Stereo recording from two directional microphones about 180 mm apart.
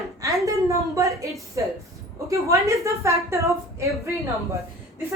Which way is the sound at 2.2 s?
15° right (ahead or behind).